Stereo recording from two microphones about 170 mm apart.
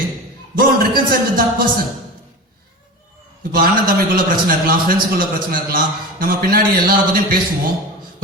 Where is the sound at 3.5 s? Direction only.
55° right (ahead or behind).